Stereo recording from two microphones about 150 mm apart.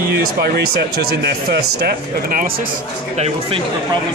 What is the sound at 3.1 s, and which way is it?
Speech, 40° right (ahead or behind).